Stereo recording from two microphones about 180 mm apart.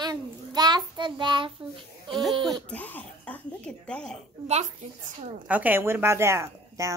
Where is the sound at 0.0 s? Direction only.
20° right (ahead or behind).